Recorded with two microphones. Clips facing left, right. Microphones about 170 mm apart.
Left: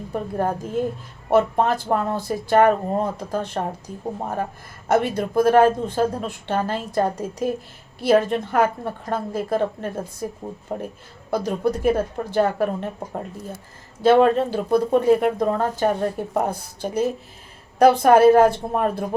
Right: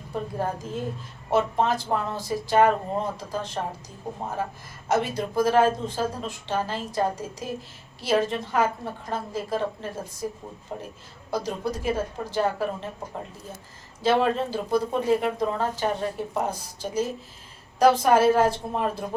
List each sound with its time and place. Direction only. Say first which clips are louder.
0.1 s speech: left 4 dB; 55° left (ahead or behind)
4.9 s speech: left 5 dB; 55° left (ahead or behind)
14.0 s speech: left 7 dB; 55° left (ahead or behind)